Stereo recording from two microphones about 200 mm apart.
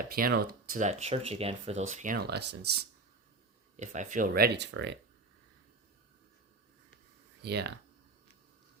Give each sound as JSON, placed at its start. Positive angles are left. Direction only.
{"t": 0.0, "sound": "speech", "side_deg": -50}
{"t": 2.1, "sound": "speech", "side_deg": -55}
{"t": 3.8, "sound": "speech", "side_deg": -40}
{"t": 7.4, "sound": "speech", "side_deg": -55}